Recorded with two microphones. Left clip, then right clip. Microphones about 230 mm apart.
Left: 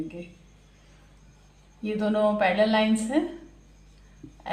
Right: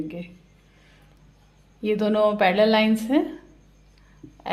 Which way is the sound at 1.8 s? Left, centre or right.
Right.